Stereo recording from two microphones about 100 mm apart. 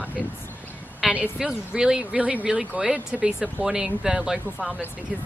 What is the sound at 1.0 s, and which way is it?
Speech, 5° right (ahead or behind).